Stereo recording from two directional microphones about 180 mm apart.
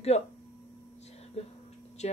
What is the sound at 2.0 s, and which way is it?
Speech, 40° left (ahead or behind).